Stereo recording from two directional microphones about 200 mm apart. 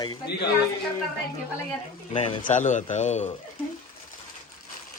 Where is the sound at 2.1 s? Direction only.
30° left (ahead or behind).